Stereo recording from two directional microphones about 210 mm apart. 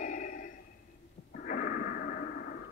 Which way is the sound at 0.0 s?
35° left (ahead or behind).